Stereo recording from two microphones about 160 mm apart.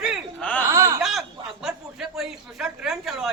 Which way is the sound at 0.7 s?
20° right (ahead or behind).